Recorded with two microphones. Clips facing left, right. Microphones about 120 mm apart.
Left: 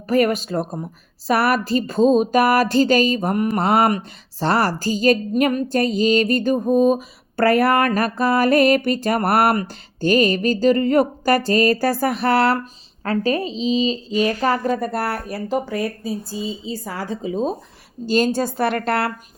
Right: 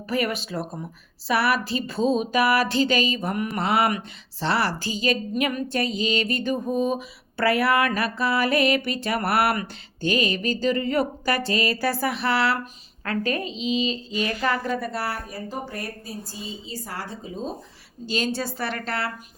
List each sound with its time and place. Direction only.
0.1 s a woman's voice: 45° left (ahead or behind)
13.1 s a woman's voice: 35° left (ahead or behind); by 15.8 s 90° left
17.2 s speech: 80° left
18.0 s a woman's voice: 45° left (ahead or behind); by 19.1 s 60° left (ahead or behind)